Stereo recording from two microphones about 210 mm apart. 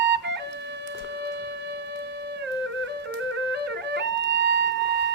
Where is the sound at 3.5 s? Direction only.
55° right (ahead or behind).